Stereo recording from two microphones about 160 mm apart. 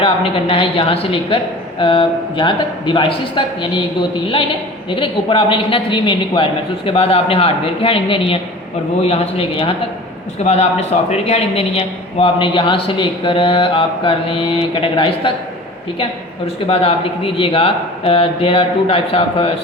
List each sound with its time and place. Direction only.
0.0 s speech: 35° left (ahead or behind)
4.9 s speech: 30° left (ahead or behind)
16.6 s speech: 35° left (ahead or behind)